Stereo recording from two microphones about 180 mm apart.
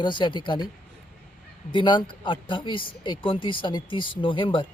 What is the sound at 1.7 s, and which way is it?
Speech, 25° left (ahead or behind).